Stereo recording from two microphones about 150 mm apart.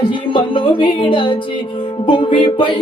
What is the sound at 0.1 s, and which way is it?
Music, 35° left (ahead or behind).